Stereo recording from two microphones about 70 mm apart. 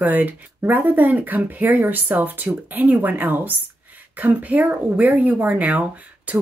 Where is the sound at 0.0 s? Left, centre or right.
Right.